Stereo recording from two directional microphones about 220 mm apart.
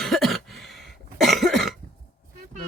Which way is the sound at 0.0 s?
Centre (ahead or behind).